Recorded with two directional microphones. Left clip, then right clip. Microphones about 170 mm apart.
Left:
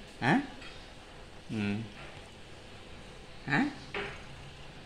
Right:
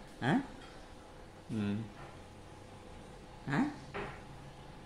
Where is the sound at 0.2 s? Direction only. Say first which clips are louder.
Left 6 dB; 30° left (ahead or behind).